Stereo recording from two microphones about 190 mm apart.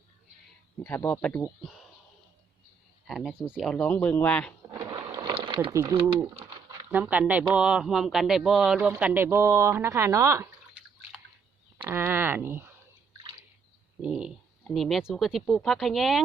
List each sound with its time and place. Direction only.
0.8 s a man's voice: 10° left (ahead or behind)
3.1 s speech: centre (ahead or behind)
4.7 s a sound: 20° right (ahead or behind)
5.7 s speech: 20° right (ahead or behind)
6.8 s speech: 10° right (ahead or behind)
11.8 s a sound: 10° right (ahead or behind)
14.0 s speech: 5° right (ahead or behind)